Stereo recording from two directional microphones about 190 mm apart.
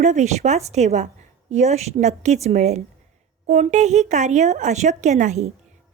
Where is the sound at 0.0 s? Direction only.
40° right (ahead or behind).